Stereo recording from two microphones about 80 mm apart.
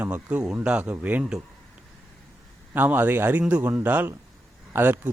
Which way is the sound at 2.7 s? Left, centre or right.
Right.